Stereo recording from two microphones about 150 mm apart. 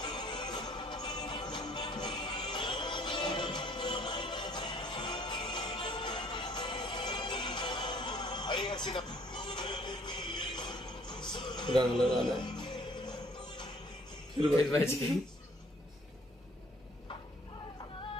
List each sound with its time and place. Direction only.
0.0 s music: 30° left (ahead or behind)
12.0 s a man's voice: 5° left (ahead or behind)
12.4 s music: 30° left (ahead or behind)